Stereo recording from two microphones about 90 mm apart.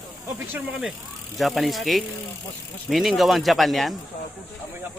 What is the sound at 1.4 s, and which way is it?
Speech, centre (ahead or behind).